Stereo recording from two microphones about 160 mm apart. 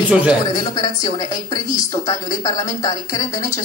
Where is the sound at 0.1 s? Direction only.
5° right (ahead or behind).